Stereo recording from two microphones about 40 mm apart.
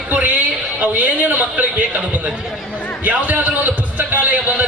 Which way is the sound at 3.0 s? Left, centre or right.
Right.